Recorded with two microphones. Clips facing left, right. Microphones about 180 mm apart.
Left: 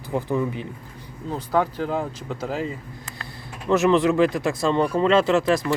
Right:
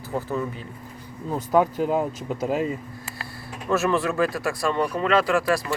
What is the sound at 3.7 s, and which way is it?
Speech, 20° left (ahead or behind).